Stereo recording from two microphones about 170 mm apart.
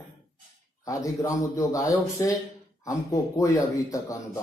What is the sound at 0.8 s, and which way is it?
Speech, 20° left (ahead or behind).